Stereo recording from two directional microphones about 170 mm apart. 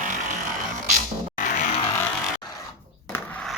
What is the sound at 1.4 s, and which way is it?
Music, 45° left (ahead or behind).